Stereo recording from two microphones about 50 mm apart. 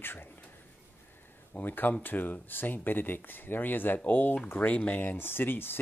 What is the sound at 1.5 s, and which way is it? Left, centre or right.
Speech, left.